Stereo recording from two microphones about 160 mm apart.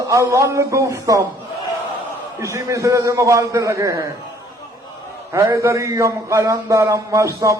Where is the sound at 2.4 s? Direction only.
20° right (ahead or behind).